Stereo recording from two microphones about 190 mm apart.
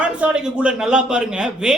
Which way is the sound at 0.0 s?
5° right (ahead or behind).